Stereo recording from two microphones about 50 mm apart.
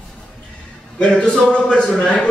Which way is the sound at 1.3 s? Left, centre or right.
Centre.